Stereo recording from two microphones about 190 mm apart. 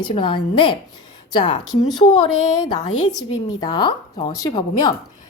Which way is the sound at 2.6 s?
20° left (ahead or behind).